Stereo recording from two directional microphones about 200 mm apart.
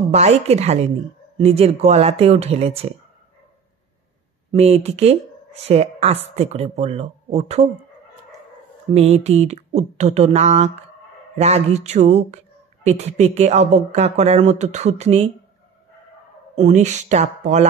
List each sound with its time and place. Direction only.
0.1 s a woman's voice: 35° right (ahead or behind)
4.5 s a woman's voice: 30° right (ahead or behind)
9.1 s a woman's voice: 35° right (ahead or behind)
16.5 s a woman's voice: 35° right (ahead or behind)